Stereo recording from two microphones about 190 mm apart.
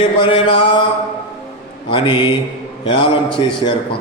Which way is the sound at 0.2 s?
30° left (ahead or behind).